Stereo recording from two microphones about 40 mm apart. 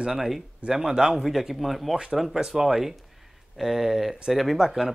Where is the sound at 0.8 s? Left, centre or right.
Centre.